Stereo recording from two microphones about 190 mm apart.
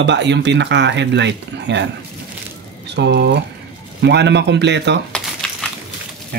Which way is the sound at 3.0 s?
60° right (ahead or behind).